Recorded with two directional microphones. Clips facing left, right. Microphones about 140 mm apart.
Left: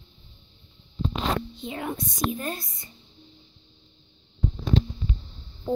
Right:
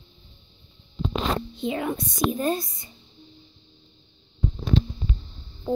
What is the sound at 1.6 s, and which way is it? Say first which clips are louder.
Speech: right 8 dB; 80° right.